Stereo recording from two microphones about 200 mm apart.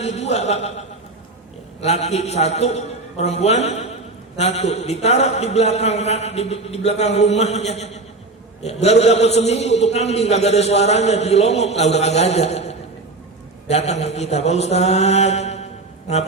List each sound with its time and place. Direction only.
0.0 s a man's voice: 35° left (ahead or behind)